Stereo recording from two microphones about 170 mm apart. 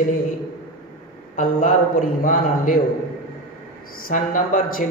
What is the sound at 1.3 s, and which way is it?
A man's voice, 55° left (ahead or behind).